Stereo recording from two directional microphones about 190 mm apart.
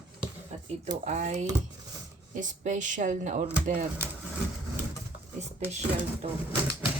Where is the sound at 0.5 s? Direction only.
35° right (ahead or behind).